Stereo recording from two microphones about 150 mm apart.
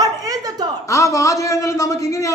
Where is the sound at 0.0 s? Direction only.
25° right (ahead or behind).